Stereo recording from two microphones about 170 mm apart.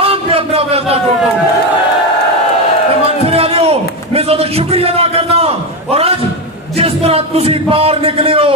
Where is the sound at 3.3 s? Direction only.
35° right (ahead or behind).